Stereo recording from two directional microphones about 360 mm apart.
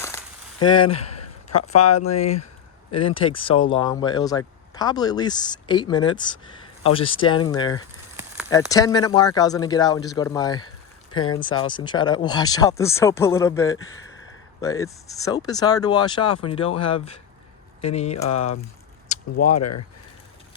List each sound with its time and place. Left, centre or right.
0.6 s speech: centre
1.7 s speech: left
2.9 s speech: centre
19.0 s a sound: left
19.5 s speech: left